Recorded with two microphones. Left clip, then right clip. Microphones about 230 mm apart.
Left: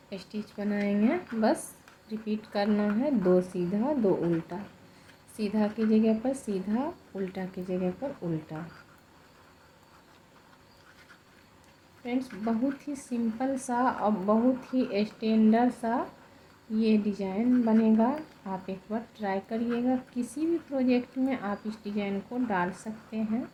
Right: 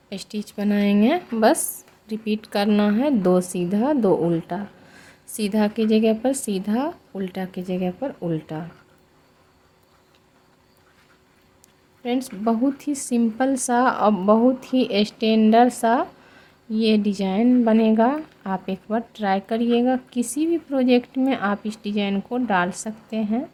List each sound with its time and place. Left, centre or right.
0.1 s a woman's voice: right
12.0 s a woman's voice: right